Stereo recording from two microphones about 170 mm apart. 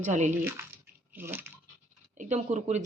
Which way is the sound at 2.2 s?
45° right (ahead or behind).